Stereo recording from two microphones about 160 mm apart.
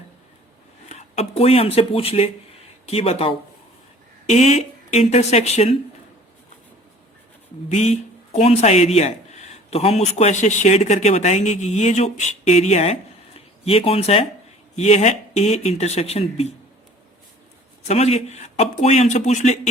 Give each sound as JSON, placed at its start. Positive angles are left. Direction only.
{"t": 0.9, "sound": "a man's voice", "side_deg": 40}
{"t": 7.7, "sound": "a man's voice", "side_deg": 45}
{"t": 17.8, "sound": "a man's voice", "side_deg": 40}